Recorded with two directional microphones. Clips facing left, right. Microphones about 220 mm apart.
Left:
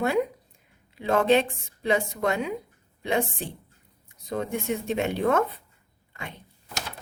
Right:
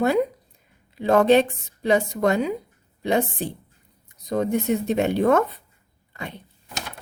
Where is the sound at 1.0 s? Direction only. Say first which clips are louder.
Right 5 dB; 40° right (ahead or behind).